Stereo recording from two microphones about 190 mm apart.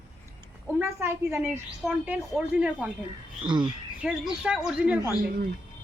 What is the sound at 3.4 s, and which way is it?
Speech, 25° right (ahead or behind).